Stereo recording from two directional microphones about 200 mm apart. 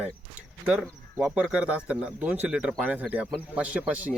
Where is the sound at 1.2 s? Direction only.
5° right (ahead or behind).